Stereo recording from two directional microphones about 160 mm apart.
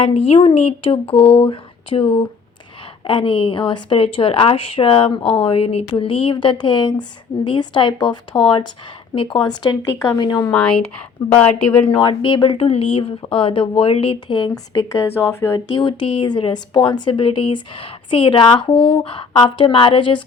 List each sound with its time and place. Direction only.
0.0 s a woman's voice: 35° left (ahead or behind)
9.4 s a woman's voice: 25° left (ahead or behind)
10.5 s speech: 5° left (ahead or behind)
11.9 s a woman's voice: 30° left (ahead or behind); by 15.6 s 15° left (ahead or behind)
15.7 s a woman's voice: 30° left (ahead or behind)